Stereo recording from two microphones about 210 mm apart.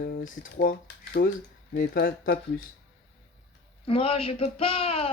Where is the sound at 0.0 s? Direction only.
50° left (ahead or behind).